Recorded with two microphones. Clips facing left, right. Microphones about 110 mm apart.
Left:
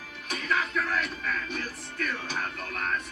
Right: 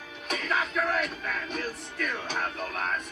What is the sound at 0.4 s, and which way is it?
Music, 30° right (ahead or behind).